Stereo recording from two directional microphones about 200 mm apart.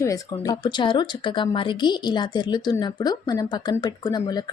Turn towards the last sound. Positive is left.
turn(degrees=20)  # may be behind; listen again after turning